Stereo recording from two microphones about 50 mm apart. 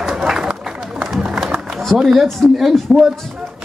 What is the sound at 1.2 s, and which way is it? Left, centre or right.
Music, centre.